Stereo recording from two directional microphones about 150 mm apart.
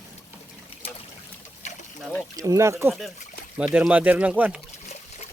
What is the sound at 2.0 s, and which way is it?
Speech, centre (ahead or behind).